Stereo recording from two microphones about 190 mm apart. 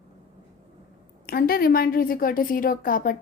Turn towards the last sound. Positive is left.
turn(degrees=45)  # may be behind; listen again after turning